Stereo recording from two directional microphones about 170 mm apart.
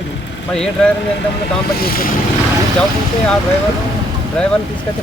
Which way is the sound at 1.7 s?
60° left (ahead or behind).